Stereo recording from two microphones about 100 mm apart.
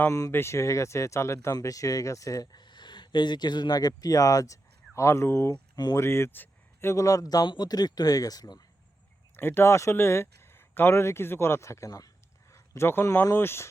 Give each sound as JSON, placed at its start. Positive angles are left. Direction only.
{"t": 0.1, "sound": "speech", "side_deg": 30}
{"t": 5.7, "sound": "speech", "side_deg": 45}
{"t": 6.0, "sound": "speech", "side_deg": 25}
{"t": 6.9, "sound": "speech", "side_deg": 35}
{"t": 9.3, "sound": "speech", "side_deg": 20}